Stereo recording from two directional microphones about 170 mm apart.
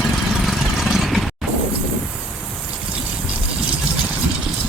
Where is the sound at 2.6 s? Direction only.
5° right (ahead or behind).